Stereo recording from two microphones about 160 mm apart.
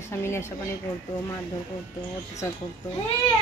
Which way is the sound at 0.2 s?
15° left (ahead or behind).